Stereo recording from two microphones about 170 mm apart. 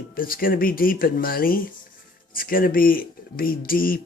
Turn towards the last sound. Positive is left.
turn(degrees=55)  # may be behind; listen again after turning